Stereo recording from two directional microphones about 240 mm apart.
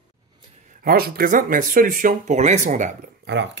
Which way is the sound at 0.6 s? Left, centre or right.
Right.